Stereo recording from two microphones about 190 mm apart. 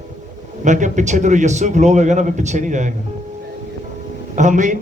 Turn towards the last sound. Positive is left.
turn(degrees=-40)  # may be behind; listen again after turning